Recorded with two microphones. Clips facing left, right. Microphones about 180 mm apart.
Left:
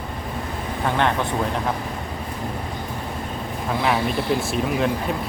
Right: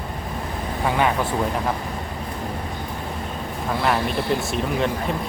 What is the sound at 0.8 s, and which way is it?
Speech, 5° right (ahead or behind).